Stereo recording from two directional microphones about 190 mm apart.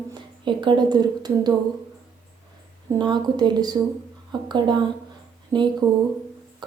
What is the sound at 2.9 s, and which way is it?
A woman's voice, 20° right (ahead or behind).